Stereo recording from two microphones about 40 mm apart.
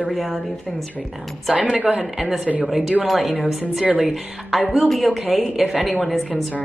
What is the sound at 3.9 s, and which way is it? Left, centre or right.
Speech, centre.